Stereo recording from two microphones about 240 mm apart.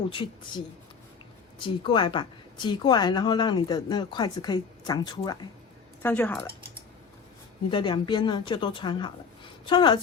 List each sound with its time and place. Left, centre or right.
0.1 s a woman's voice: left
6.0 s speech: centre
7.7 s a woman's voice: centre